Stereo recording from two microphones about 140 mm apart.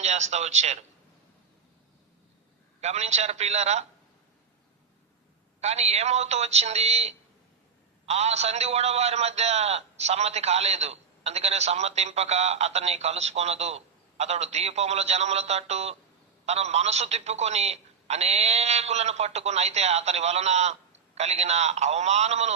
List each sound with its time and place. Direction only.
0.0 s a man's voice: 55° right (ahead or behind)
2.8 s a man's voice: 50° right (ahead or behind)
5.5 s a man's voice: 50° right (ahead or behind)